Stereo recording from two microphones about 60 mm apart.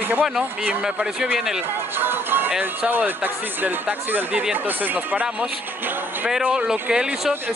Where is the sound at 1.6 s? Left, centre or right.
Right.